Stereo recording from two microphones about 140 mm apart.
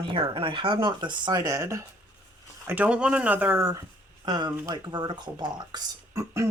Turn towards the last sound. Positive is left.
turn(degrees=-20)  # may be behind; listen again after turning